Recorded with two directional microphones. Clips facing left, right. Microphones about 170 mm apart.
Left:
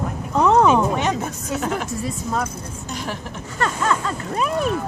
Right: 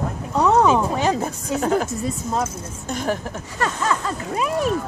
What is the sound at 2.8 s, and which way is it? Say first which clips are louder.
Speech: right 6 dB; 50° right (ahead or behind).